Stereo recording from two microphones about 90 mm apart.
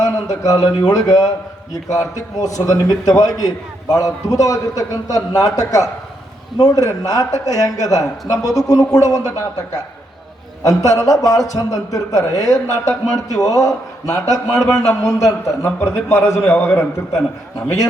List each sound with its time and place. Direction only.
0.0 s a man's voice: 45° left (ahead or behind)
10.6 s a man's voice: 40° left (ahead or behind)